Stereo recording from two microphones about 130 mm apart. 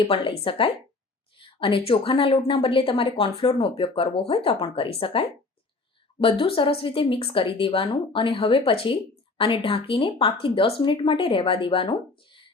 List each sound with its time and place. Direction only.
0.0 s a woman's voice: 45° left (ahead or behind)